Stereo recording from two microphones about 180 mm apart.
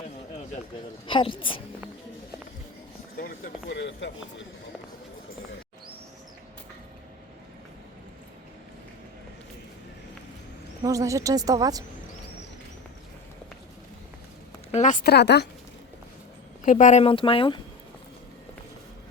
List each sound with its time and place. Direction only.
1.0 s speech: 30° left (ahead or behind)
3.2 s a sound: 55° left (ahead or behind)
3.7 s speech: 85° left
10.8 s speech: 20° right (ahead or behind)
14.7 s a woman's voice: 40° left (ahead or behind)
15.0 s speech: 65° left (ahead or behind)
16.6 s speech: 40° left (ahead or behind)